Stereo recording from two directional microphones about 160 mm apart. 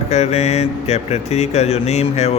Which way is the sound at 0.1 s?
40° left (ahead or behind).